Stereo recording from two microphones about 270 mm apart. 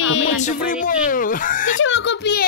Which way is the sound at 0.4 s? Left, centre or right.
Left.